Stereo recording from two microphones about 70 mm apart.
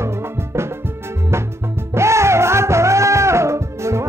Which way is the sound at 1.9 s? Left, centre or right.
Right.